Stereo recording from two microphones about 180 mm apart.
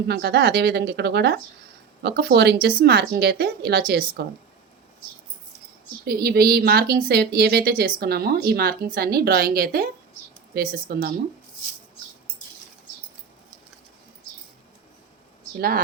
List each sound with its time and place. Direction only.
0.1 s a woman's voice: 65° right (ahead or behind)
6.1 s a woman's voice: 60° right (ahead or behind)